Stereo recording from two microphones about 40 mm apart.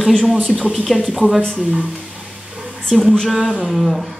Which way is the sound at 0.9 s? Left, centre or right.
Centre.